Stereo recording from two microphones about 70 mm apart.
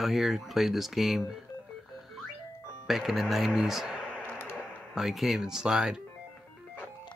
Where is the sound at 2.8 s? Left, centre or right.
Centre.